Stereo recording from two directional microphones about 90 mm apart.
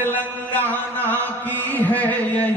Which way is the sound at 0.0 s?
20° left (ahead or behind).